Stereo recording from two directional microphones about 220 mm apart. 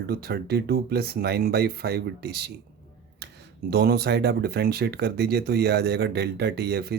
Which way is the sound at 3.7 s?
45° right (ahead or behind).